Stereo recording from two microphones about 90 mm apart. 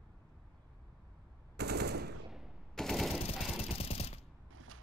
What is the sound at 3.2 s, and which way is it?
Jackhammer, 90° left.